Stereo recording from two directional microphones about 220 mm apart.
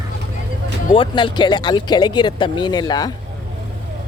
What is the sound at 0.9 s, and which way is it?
Speech, 25° left (ahead or behind).